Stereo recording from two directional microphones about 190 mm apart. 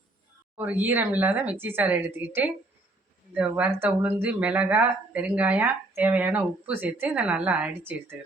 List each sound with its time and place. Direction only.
0.5 s speech: 10° right (ahead or behind)